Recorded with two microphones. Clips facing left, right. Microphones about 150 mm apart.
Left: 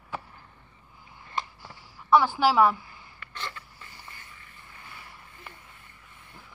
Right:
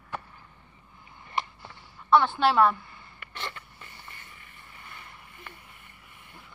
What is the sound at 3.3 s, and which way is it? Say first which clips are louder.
Creak: even; 20° right (ahead or behind).